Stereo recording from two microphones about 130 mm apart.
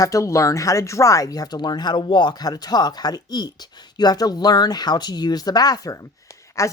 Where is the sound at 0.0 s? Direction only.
25° left (ahead or behind).